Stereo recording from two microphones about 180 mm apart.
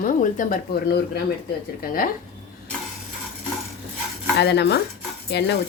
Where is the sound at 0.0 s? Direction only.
50° left (ahead or behind).